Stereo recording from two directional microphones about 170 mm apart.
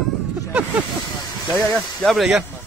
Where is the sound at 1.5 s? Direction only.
10° right (ahead or behind).